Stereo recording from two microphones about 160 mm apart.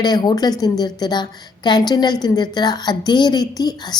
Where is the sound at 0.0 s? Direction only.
25° left (ahead or behind).